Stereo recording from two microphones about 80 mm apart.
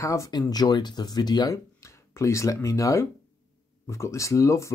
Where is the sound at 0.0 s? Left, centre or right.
Left.